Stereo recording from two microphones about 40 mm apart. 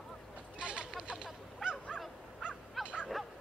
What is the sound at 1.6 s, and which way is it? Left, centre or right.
Honk, centre.